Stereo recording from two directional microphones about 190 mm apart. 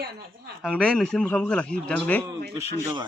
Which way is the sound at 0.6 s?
Centre (ahead or behind).